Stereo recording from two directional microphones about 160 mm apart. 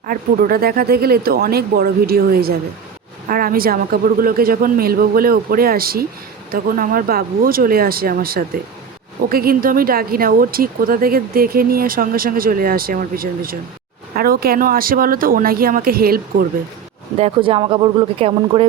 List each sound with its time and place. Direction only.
0.1 s speech: 65° right (ahead or behind)
17.2 s speech: 35° right (ahead or behind)